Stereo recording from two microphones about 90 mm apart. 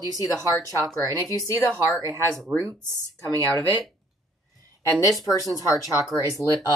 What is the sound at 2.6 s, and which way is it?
Speech, 30° right (ahead or behind).